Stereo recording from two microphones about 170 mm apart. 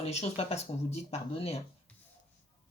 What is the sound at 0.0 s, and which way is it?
Speech, 40° left (ahead or behind).